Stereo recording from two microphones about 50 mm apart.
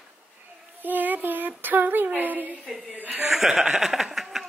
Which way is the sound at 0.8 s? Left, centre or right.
Right.